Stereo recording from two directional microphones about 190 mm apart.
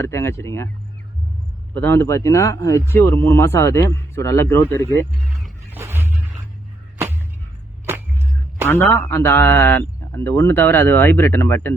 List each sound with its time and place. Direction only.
0.0 s a man's voice: 15° left (ahead or behind)
1.7 s a man's voice: 10° left (ahead or behind)
5.7 s a sound: 10° right (ahead or behind)
7.9 s music: 10° right (ahead or behind)
9.0 s a man's voice: 10° left (ahead or behind)